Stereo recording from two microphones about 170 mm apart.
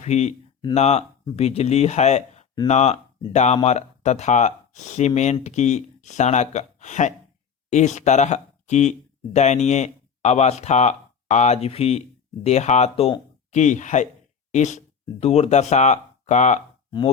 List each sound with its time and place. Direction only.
0.0 s speech: 40° left (ahead or behind)